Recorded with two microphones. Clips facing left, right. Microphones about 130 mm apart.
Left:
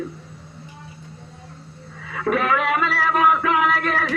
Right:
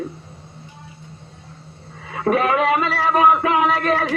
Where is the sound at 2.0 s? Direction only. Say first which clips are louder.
Right 3 dB; 30° right (ahead or behind).